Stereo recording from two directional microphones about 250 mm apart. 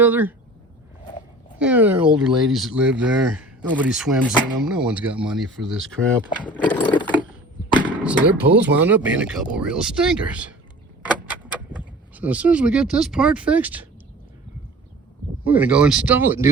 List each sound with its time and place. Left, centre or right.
0.0 s speech: centre
1.5 s speech: centre
6.3 s speech: centre
6.7 s a sound: centre
8.0 s speech: centre
12.1 s speech: centre
15.4 s speech: centre